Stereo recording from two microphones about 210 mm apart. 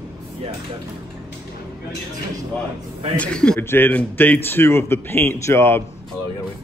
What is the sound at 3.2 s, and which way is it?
A man's voice, 5° left (ahead or behind).